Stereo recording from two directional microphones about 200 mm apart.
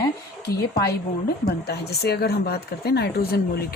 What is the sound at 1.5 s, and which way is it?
Speech, 55° left (ahead or behind).